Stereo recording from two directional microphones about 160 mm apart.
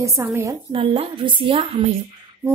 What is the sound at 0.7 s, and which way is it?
Speech, 35° right (ahead or behind).